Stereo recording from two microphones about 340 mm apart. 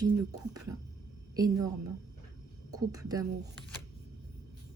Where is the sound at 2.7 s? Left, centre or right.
Centre.